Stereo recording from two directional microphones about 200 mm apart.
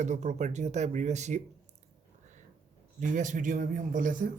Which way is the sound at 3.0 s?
40° right (ahead or behind).